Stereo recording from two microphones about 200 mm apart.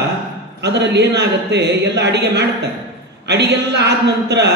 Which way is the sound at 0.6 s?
55° right (ahead or behind).